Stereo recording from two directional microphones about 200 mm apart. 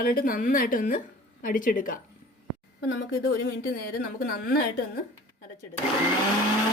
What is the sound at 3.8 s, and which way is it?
Speech, 50° left (ahead or behind).